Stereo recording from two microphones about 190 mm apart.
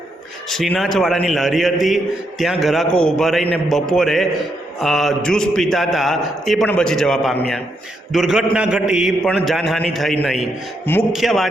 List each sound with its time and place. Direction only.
0.4 s a man's voice: centre (ahead or behind)